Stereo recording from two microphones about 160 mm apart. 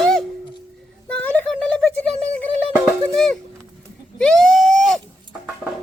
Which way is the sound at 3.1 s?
5° left (ahead or behind).